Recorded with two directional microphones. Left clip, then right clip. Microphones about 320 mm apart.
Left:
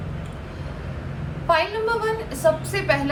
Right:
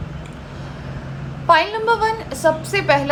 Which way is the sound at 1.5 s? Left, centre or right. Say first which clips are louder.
Right 6 dB; right.